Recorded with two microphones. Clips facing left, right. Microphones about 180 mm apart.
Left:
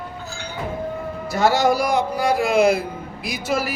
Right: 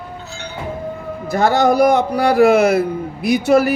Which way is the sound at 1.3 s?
55° right (ahead or behind).